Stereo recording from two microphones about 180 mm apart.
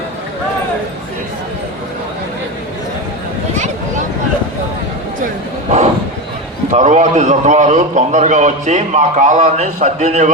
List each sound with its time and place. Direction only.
6.7 s a man's voice: 40° right (ahead or behind)